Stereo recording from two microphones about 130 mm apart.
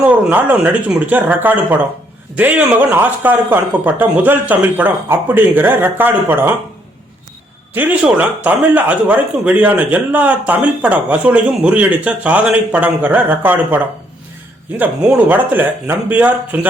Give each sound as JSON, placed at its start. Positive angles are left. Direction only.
{"t": 0.0, "sound": "a man's voice", "side_deg": -10}
{"t": 7.7, "sound": "a man's voice", "side_deg": -10}